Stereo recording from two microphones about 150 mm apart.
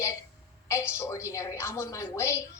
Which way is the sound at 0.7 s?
20° left (ahead or behind).